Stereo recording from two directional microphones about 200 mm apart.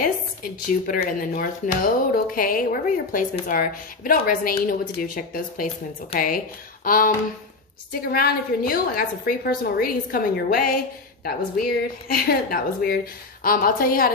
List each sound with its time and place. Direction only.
0.0 s speech: 45° left (ahead or behind)
8.1 s speech: 50° left (ahead or behind)